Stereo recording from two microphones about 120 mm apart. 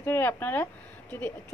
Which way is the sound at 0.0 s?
15° left (ahead or behind).